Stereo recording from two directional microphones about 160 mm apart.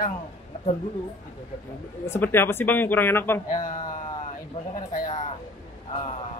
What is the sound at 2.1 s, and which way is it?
Speech, 15° left (ahead or behind).